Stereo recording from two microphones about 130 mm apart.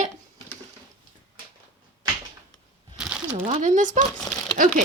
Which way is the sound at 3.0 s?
10° right (ahead or behind).